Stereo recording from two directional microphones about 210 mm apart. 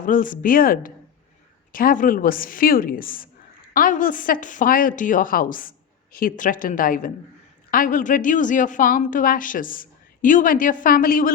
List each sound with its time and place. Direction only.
0.0 s a woman's voice: 40° left (ahead or behind)